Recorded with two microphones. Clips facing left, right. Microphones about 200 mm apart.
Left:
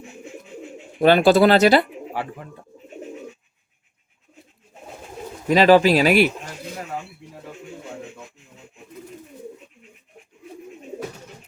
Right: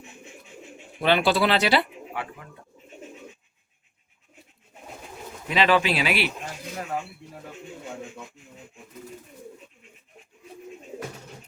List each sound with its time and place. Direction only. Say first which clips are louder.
1.0 s speech: left 8 dB; 45° left (ahead or behind)
5.5 s speech: left 8 dB; 40° left (ahead or behind)